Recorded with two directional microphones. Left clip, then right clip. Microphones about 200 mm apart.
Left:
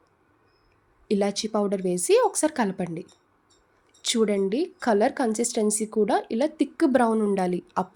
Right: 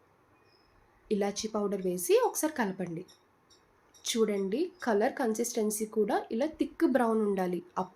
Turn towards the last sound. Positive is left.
turn(degrees=50)  # may be behind; listen again after turning